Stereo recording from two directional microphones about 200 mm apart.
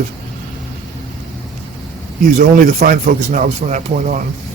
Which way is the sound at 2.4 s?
45° right (ahead or behind).